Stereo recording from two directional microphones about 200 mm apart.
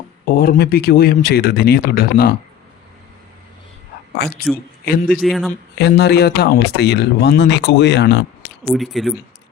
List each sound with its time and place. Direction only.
0.3 s speech: 45° left (ahead or behind)
4.2 s speech: 55° left (ahead or behind)
5.2 s speech: centre (ahead or behind)
5.7 s speech: 55° left (ahead or behind)
8.7 s speech: centre (ahead or behind)